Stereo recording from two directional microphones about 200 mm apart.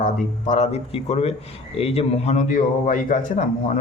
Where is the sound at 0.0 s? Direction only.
35° left (ahead or behind).